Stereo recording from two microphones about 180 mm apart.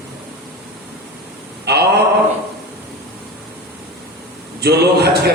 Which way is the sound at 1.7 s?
65° right (ahead or behind).